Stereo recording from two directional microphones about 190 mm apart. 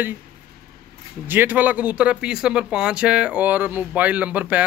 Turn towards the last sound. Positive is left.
turn(degrees=-10)  # may be behind; listen again after turning